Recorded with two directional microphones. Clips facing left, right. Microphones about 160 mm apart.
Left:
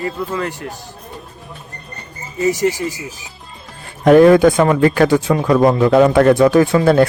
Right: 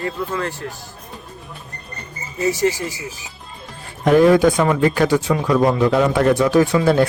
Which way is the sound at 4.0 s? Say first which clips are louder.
Left 4 dB; 60° left (ahead or behind).